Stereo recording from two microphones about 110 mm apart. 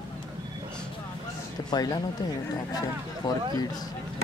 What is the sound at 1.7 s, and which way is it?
Speech, 35° left (ahead or behind).